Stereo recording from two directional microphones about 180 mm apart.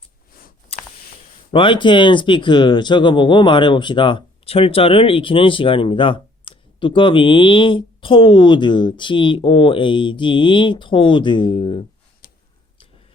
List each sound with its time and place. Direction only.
0.7 s a sound: 35° left (ahead or behind)
1.5 s speech: 25° left (ahead or behind)
12.2 s tick-tock: 55° left (ahead or behind)